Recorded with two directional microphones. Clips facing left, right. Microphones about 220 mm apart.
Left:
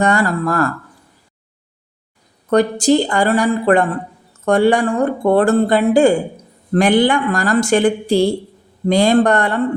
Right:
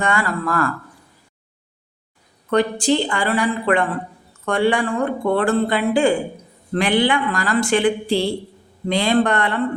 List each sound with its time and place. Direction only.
0.0 s speech: 40° left (ahead or behind)
2.5 s speech: 40° left (ahead or behind)